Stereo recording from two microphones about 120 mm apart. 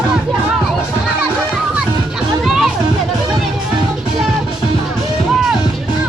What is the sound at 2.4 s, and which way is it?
Music, centre (ahead or behind).